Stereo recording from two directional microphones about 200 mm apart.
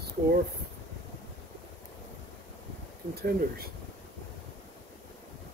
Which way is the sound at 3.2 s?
50° right (ahead or behind).